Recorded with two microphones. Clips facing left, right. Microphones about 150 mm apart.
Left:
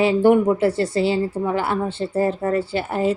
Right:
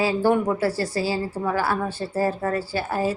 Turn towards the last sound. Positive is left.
turn(degrees=25)  # may be behind; listen again after turning